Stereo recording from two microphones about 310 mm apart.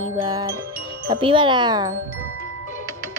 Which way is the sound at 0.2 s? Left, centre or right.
Centre.